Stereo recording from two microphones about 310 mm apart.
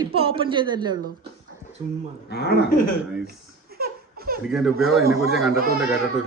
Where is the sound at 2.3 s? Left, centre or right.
Left.